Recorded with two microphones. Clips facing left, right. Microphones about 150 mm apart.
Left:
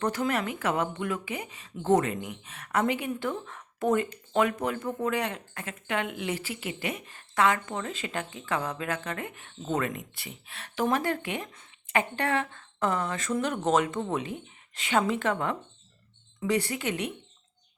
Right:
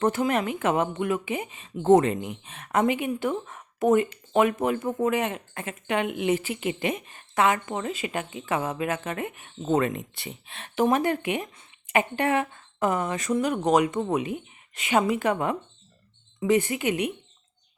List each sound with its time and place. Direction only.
0.0 s a woman's voice: 20° right (ahead or behind)